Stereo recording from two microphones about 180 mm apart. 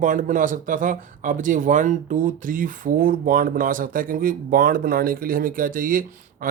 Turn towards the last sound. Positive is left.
turn(degrees=-50)  # may be behind; listen again after turning